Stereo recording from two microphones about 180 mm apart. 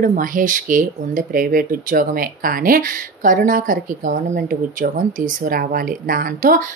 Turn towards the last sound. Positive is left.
turn(degrees=-50)  # may be behind; listen again after turning